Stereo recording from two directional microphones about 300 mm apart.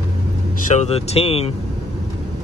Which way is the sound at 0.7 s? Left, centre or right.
Left.